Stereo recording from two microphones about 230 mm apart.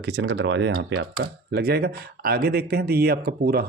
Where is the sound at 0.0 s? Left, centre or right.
Right.